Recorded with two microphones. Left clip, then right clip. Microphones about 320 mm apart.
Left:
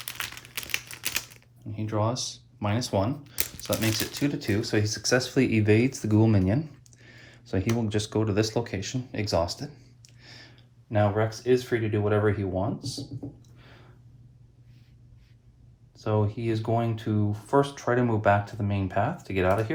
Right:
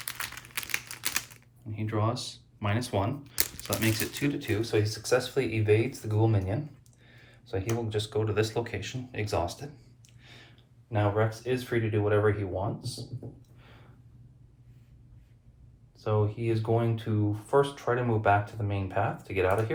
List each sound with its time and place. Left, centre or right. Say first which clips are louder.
0.0 s crumpling: left 2 dB; centre
1.7 s speech: left 3 dB; centre
7.0 s a sound: left 6 dB; left
7.9 s speech: left 2 dB; left
10.9 s speech: left 3 dB; left
16.0 s speech: left 1 dB; left